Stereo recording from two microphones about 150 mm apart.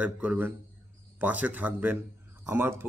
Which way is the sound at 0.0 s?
10° right (ahead or behind).